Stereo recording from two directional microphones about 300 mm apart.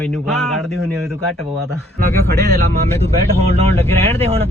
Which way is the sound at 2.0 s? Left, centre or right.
Right.